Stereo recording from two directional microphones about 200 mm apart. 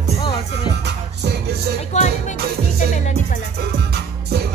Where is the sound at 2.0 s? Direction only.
35° left (ahead or behind).